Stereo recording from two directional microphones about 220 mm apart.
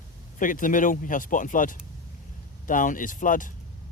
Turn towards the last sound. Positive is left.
turn(degrees=35)  # may be behind; listen again after turning